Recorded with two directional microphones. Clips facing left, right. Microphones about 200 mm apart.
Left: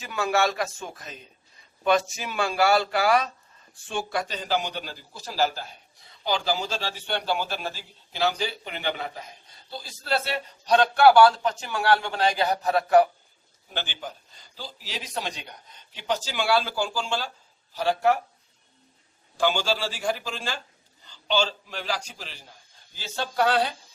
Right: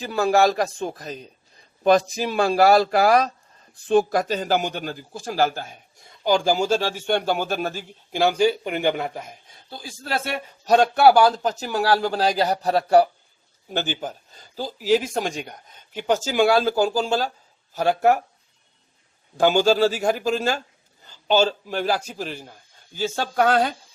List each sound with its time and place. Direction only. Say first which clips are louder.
0.0 s a man's voice: right 6 dB; 35° right (ahead or behind)
13.7 s a man's voice: right 7 dB; 45° right (ahead or behind)
19.4 s a man's voice: right 8 dB; 45° right (ahead or behind)